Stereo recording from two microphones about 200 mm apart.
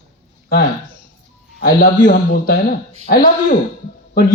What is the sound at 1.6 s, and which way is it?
Speech, 45° left (ahead or behind).